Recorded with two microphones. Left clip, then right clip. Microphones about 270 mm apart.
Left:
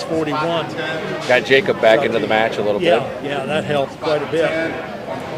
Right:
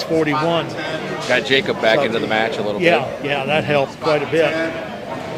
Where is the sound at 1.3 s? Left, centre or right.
Centre.